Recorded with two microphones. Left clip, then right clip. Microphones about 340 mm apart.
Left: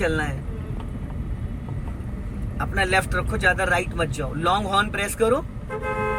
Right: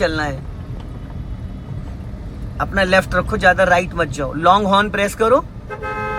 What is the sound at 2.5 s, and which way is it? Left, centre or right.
Speech, centre.